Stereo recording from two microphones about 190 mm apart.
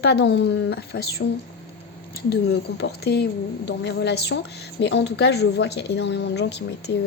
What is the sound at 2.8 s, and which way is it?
Speech, 60° left (ahead or behind).